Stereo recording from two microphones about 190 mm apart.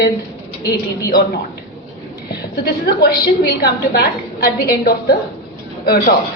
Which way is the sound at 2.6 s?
55° left (ahead or behind).